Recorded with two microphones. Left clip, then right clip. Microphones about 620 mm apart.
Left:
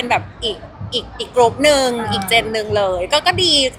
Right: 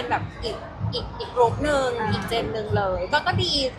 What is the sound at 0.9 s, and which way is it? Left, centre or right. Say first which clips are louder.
A woman's voice: left 8 dB; left.